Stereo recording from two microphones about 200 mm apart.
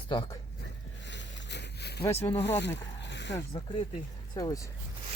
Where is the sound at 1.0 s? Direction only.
60° left (ahead or behind).